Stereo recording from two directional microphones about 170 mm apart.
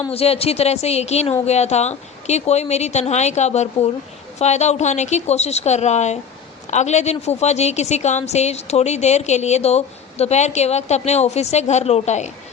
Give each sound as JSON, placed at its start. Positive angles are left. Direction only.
{"t": 0.1, "sound": "a woman's voice", "side_deg": 35}